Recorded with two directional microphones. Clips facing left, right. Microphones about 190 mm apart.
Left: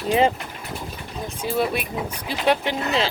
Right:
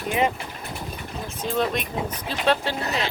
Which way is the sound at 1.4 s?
10° left (ahead or behind).